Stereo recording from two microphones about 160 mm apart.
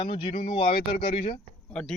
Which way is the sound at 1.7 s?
5° left (ahead or behind).